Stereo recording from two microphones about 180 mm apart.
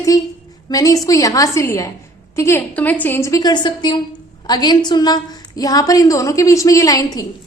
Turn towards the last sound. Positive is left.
turn(degrees=20)  # may be behind; listen again after turning